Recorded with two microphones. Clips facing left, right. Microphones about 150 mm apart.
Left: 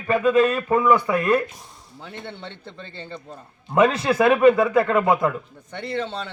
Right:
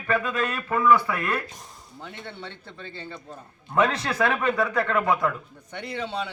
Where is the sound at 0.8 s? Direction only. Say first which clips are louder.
Right 1 dB; 20° left (ahead or behind).